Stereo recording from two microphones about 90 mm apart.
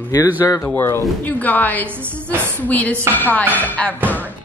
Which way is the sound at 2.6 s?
20° left (ahead or behind).